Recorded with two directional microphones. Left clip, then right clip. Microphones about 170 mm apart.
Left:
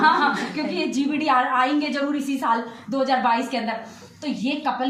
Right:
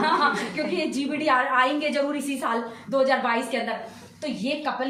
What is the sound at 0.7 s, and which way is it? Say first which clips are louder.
A woman's voice: left 2 dB; 25° right (ahead or behind).